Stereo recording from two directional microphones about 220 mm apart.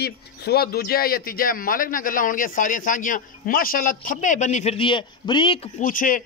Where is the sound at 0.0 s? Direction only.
45° left (ahead or behind); by 5.7 s 25° left (ahead or behind).